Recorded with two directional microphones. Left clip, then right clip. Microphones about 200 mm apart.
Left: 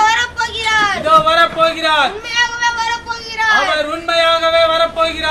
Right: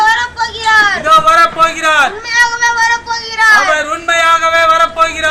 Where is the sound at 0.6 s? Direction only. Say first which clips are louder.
Right 6 dB; 25° left (ahead or behind).